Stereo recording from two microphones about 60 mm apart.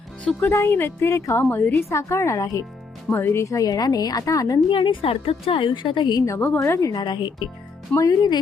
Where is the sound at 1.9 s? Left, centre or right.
Left.